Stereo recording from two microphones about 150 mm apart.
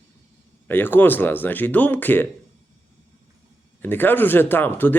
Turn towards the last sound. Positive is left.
turn(degrees=15)  # may be behind; listen again after turning